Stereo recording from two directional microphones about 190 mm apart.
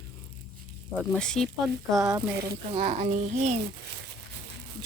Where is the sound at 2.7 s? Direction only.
35° right (ahead or behind).